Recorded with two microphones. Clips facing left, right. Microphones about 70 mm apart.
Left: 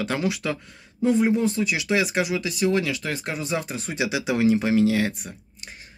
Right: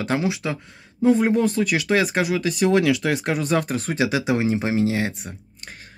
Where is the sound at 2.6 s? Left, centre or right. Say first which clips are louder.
Right 5 dB; right.